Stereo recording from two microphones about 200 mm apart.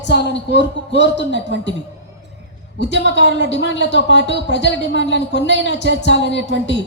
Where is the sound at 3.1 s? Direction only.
60° left (ahead or behind).